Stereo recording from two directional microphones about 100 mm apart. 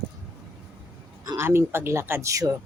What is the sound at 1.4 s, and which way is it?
Speech, 25° right (ahead or behind).